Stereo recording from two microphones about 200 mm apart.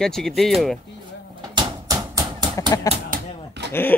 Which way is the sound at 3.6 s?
60° right (ahead or behind).